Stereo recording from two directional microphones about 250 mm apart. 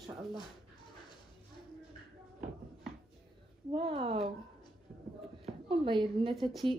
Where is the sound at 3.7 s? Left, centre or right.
Right.